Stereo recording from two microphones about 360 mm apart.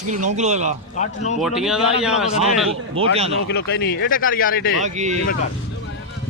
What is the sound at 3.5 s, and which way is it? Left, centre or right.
Speech, left.